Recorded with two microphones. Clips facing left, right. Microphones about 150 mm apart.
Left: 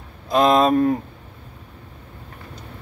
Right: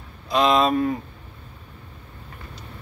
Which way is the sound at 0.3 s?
45° left (ahead or behind).